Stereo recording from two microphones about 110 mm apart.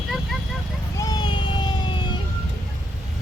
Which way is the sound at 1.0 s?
40° left (ahead or behind).